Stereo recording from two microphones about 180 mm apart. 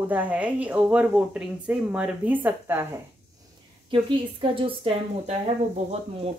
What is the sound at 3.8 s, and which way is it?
Speech, 30° right (ahead or behind).